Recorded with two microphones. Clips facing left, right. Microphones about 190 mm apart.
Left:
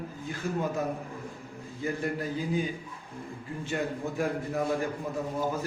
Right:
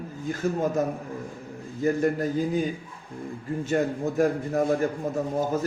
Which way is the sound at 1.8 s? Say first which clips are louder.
Right 8 dB; 45° right (ahead or behind).